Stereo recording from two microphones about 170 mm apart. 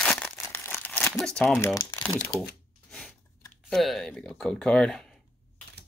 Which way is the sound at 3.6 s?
Centre (ahead or behind).